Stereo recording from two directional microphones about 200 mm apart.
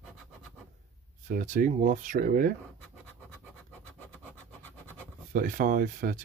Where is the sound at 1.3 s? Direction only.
40° right (ahead or behind).